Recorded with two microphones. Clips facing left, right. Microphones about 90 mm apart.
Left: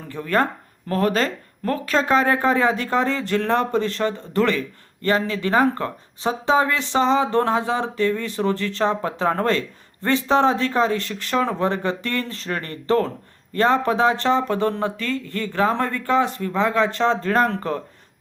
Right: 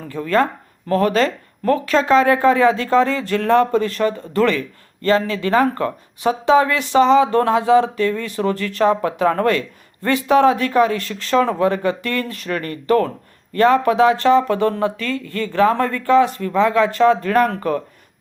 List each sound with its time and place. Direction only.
0.9 s speech: 35° left (ahead or behind)
2.0 s speech: 20° left (ahead or behind)